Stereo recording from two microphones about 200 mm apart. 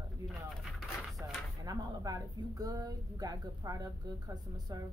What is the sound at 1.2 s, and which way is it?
A woman's voice, 15° right (ahead or behind).